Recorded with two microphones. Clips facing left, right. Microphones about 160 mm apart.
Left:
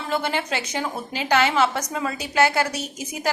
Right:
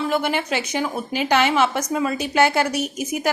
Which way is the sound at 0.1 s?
15° right (ahead or behind).